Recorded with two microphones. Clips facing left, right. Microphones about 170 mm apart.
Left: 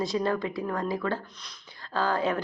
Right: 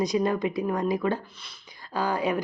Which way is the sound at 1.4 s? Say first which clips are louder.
Even; 10° right (ahead or behind).